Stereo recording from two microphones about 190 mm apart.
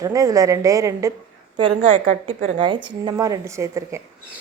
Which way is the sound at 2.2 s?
25° right (ahead or behind).